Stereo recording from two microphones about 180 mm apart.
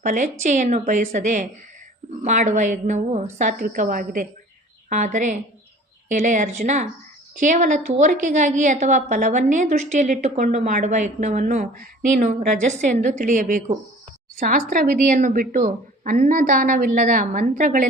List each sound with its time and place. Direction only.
0.0 s a woman's voice: 45° right (ahead or behind)